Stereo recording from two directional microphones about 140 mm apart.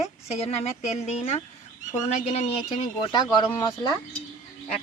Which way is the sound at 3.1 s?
35° left (ahead or behind).